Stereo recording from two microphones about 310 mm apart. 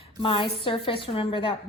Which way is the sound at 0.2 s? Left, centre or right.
Centre.